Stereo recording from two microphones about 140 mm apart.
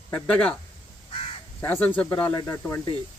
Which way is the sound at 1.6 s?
15° left (ahead or behind).